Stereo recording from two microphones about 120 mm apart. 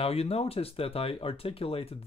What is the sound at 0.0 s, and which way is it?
Speech, 55° left (ahead or behind).